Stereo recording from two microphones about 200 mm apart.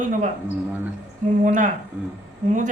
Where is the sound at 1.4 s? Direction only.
40° right (ahead or behind).